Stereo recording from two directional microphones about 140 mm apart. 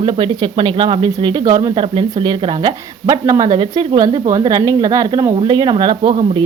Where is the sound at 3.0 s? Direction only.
25° right (ahead or behind).